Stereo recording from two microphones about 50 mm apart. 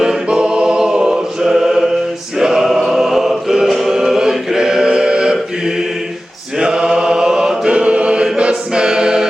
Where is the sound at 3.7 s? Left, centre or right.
Centre.